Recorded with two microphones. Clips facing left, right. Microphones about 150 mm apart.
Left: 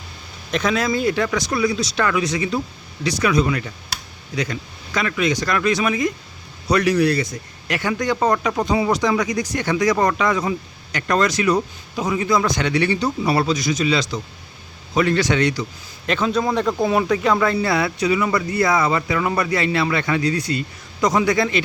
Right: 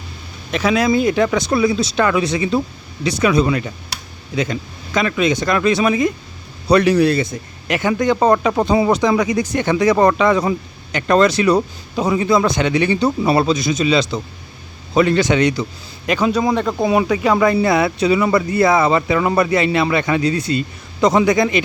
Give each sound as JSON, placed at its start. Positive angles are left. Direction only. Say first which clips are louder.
{"t": 0.5, "sound": "a man's voice", "louder": "right 4 dB", "side_deg": -5}
{"t": 0.9, "sound": "speech", "louder": "right 5 dB", "side_deg": -20}
{"t": 4.9, "sound": "a man's voice", "louder": "right 4 dB", "side_deg": -25}